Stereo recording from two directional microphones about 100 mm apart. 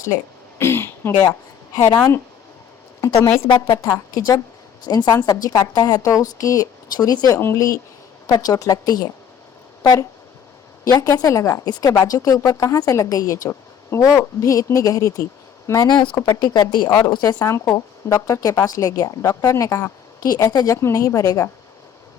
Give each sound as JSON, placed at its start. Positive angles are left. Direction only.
{"t": 0.6, "sound": "a sound", "side_deg": 25}
{"t": 3.0, "sound": "a woman's voice", "side_deg": 30}
{"t": 3.4, "sound": "a woman's voice", "side_deg": 55}
{"t": 4.9, "sound": "a woman's voice", "side_deg": 40}
{"t": 7.3, "sound": "a woman's voice", "side_deg": 25}
{"t": 8.3, "sound": "a woman's voice", "side_deg": 40}
{"t": 15.9, "sound": "speech", "side_deg": 50}
{"t": 16.1, "sound": "a woman's voice", "side_deg": 35}
{"t": 17.4, "sound": "a woman's voice", "side_deg": 30}